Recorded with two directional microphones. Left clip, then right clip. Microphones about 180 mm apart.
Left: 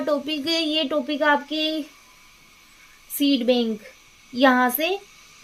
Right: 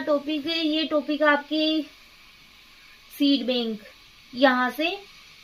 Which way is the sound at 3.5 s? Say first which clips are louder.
Left 5 dB; 40° left (ahead or behind).